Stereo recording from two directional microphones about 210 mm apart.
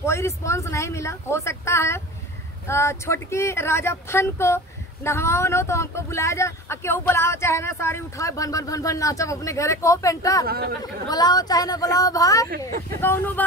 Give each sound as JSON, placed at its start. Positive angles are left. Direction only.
{"t": 0.0, "sound": "speech", "side_deg": 15}
{"t": 10.4, "sound": "speech", "side_deg": -45}
{"t": 10.8, "sound": "speech", "side_deg": 20}